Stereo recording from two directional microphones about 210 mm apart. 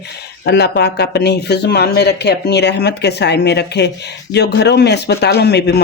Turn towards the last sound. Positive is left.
turn(degrees=50)  # may be behind; listen again after turning